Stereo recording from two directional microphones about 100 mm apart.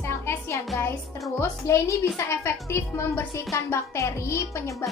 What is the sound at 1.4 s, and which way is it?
Speech, 30° left (ahead or behind).